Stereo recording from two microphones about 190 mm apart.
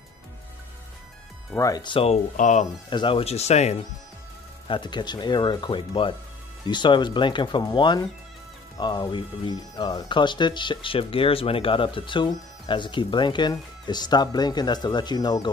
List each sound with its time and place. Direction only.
1.6 s speech: 20° left (ahead or behind)
2.3 s speech: 40° left (ahead or behind)
2.9 s speech: 25° left (ahead or behind)
4.6 s speech: 25° left (ahead or behind)